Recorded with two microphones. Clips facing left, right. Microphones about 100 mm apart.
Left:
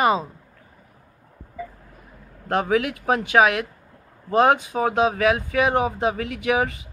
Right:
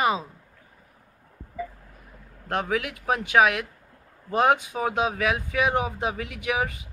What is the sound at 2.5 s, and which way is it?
Speech, centre (ahead or behind).